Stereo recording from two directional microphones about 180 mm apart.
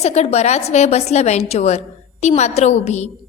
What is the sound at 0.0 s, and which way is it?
A woman's voice, 35° left (ahead or behind).